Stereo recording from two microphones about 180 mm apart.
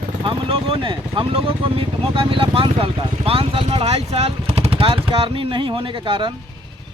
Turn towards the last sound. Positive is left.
turn(degrees=-25)  # may be behind; listen again after turning